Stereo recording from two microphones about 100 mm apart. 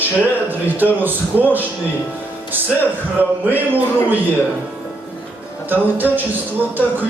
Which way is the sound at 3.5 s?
15° right (ahead or behind).